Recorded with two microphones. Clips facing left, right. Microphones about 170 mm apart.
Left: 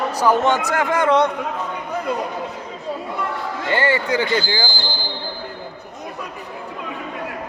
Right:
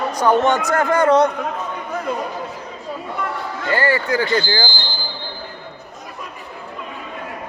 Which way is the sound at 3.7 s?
25° left (ahead or behind).